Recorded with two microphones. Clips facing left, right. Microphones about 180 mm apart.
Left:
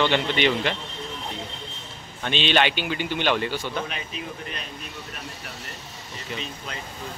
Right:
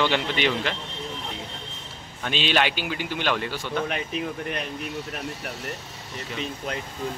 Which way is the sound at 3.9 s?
60° right (ahead or behind).